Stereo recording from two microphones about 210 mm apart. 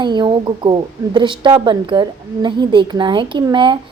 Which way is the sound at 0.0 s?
20° right (ahead or behind).